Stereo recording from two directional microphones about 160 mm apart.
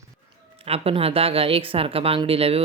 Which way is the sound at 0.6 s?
35° right (ahead or behind).